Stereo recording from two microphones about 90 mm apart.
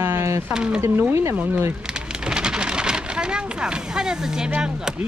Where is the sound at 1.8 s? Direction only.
10° right (ahead or behind).